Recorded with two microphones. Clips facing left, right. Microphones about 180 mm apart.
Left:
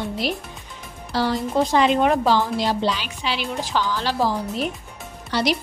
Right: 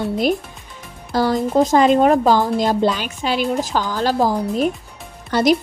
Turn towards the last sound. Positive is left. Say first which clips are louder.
# right 6 dB
turn(degrees=-45)  # may be behind; listen again after turning